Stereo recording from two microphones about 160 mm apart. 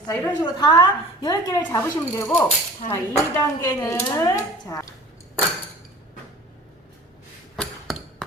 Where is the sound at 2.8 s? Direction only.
50° left (ahead or behind).